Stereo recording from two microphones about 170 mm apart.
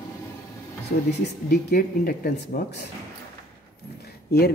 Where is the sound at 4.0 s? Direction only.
70° left (ahead or behind).